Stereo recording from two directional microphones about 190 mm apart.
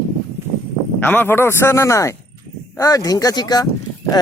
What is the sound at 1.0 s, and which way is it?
Speech, 10° left (ahead or behind).